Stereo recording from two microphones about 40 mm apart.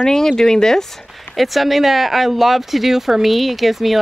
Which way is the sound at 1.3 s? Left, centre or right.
Centre.